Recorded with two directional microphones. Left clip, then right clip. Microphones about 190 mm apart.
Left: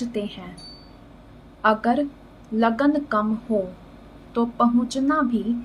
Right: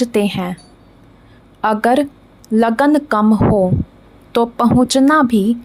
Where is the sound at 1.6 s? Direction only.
60° right (ahead or behind).